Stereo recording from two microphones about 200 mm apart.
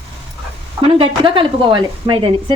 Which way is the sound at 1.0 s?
25° right (ahead or behind).